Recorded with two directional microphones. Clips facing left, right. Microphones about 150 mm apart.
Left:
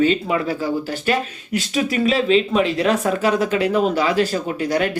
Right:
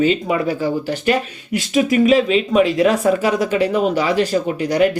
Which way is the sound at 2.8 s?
10° right (ahead or behind).